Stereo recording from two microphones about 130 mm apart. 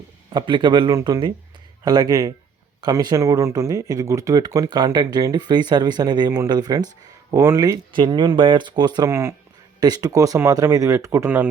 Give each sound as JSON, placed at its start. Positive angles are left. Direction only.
{"t": 0.3, "sound": "speech", "side_deg": -40}
{"t": 7.9, "sound": "speech", "side_deg": -35}